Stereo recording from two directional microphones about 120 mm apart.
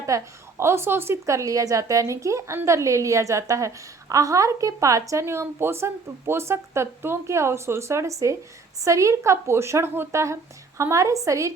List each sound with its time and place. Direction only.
0.1 s a woman's voice: 25° right (ahead or behind)